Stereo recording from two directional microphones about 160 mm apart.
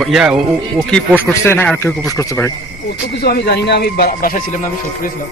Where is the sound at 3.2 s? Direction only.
90° left; by 5.1 s 55° left (ahead or behind).